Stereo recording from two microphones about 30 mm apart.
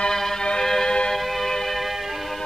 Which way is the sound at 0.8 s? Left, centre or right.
Left.